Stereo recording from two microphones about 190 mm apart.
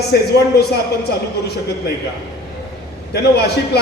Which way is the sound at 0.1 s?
55° left (ahead or behind).